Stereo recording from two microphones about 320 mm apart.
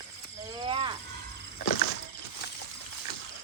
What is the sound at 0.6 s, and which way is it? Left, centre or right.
Squeal, centre.